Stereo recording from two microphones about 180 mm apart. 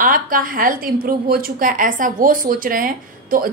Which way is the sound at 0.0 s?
50° right (ahead or behind).